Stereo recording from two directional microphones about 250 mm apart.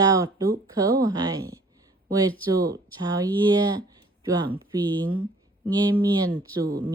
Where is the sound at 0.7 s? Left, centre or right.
Centre.